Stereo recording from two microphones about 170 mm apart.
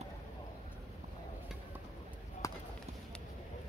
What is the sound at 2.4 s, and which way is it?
Run, 20° left (ahead or behind).